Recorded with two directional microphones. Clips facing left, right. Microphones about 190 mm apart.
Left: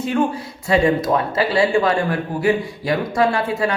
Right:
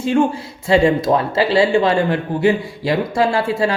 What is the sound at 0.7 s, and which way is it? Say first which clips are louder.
A man's voice: right 3 dB; 30° right (ahead or behind).